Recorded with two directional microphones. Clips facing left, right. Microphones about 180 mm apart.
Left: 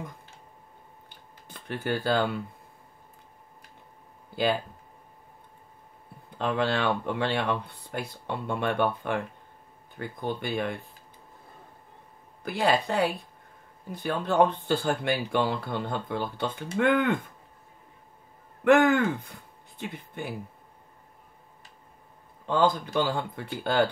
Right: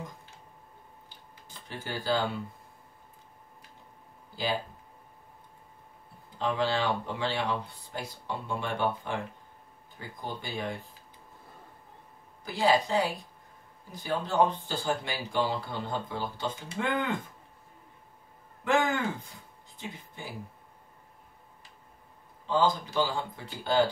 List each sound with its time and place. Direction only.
1.0 s a sound: 60° left (ahead or behind)
6.3 s speech: 60° left (ahead or behind)
12.4 s speech: 60° left (ahead or behind)
18.6 s speech: 60° left (ahead or behind)
22.5 s speech: 60° left (ahead or behind)